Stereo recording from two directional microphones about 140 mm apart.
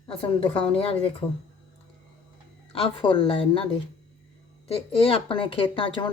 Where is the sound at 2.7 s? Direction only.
40° left (ahead or behind).